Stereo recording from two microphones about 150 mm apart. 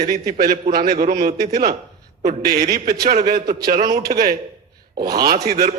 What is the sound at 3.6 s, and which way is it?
A man's voice, 90° right.